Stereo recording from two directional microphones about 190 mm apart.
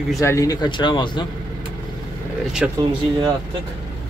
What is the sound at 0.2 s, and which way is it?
Speech, 15° left (ahead or behind).